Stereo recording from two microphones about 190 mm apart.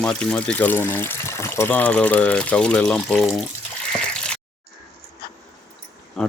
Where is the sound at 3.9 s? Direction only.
5° left (ahead or behind).